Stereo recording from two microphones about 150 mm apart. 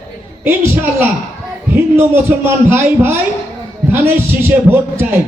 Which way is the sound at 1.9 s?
15° right (ahead or behind).